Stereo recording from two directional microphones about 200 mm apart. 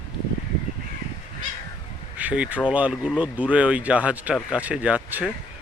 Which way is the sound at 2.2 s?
5° right (ahead or behind).